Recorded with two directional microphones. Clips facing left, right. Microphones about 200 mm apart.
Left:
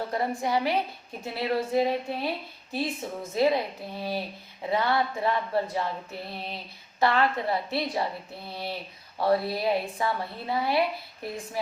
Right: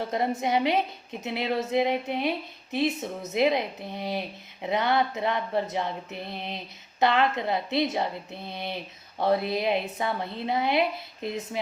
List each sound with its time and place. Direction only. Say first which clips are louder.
0.1 s a woman's voice: right 2 dB; 20° right (ahead or behind)